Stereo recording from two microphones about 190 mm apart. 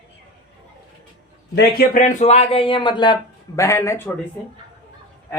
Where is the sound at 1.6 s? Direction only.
50° left (ahead or behind); by 4.1 s 15° left (ahead or behind).